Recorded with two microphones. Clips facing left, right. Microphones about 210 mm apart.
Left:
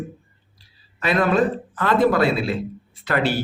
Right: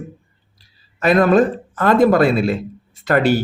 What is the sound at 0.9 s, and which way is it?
Speech, 45° right (ahead or behind).